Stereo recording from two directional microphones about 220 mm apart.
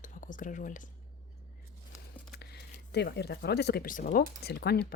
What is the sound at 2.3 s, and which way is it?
Speech, 45° left (ahead or behind).